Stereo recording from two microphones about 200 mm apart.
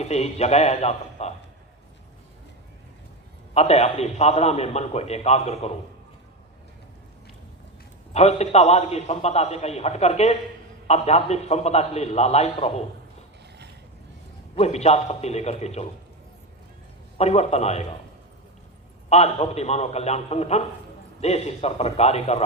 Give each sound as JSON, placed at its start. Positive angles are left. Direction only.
{"t": 0.0, "sound": "a man's voice", "side_deg": 35}
{"t": 3.5, "sound": "a man's voice", "side_deg": 35}
{"t": 8.1, "sound": "a man's voice", "side_deg": 35}
{"t": 14.5, "sound": "a man's voice", "side_deg": 30}
{"t": 17.2, "sound": "a man's voice", "side_deg": 35}
{"t": 19.1, "sound": "a man's voice", "side_deg": 30}